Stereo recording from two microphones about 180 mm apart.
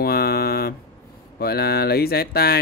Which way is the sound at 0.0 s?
60° left (ahead or behind).